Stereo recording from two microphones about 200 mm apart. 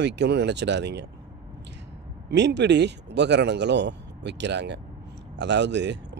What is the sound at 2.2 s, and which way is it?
Speech, 60° right (ahead or behind).